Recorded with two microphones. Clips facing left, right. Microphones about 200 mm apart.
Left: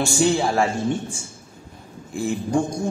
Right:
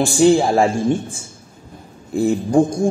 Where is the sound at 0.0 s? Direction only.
50° right (ahead or behind).